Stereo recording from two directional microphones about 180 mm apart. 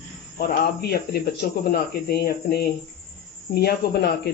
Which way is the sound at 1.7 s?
60° left (ahead or behind).